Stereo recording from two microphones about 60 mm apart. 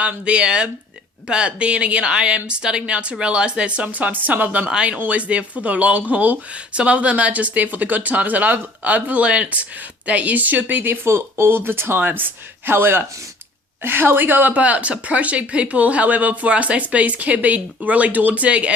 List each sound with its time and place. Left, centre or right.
0.0 s speech: centre
4.7 s speech: centre; by 10.9 s right
11.0 s speech: right